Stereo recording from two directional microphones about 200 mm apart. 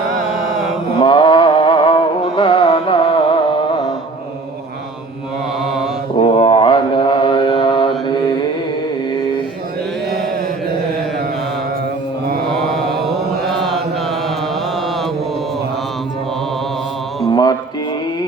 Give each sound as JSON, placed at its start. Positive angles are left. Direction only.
{"t": 0.3, "sound": "mantra", "side_deg": 0}
{"t": 1.0, "sound": "music", "side_deg": 25}
{"t": 6.1, "sound": "mantra", "side_deg": 25}
{"t": 12.6, "sound": "mantra", "side_deg": 0}